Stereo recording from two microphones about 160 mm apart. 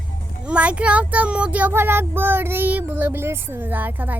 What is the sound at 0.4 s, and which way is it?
Speech, 10° right (ahead or behind).